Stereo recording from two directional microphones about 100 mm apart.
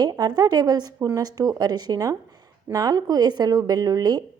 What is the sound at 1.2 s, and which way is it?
A woman's voice, 40° right (ahead or behind).